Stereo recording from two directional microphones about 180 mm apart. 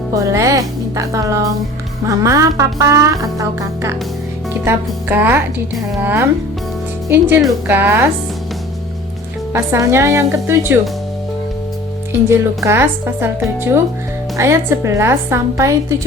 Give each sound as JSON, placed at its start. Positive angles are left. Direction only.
{"t": 0.1, "sound": "speech", "side_deg": -15}
{"t": 9.5, "sound": "speech", "side_deg": -15}
{"t": 12.6, "sound": "speech", "side_deg": -15}